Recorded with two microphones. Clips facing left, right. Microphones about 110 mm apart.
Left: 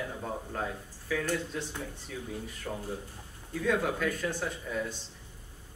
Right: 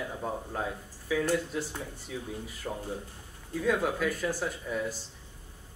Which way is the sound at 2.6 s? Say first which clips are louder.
Right 2 dB; 20° right (ahead or behind).